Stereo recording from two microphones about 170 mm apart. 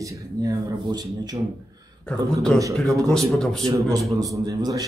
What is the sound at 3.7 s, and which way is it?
Speech, 20° right (ahead or behind).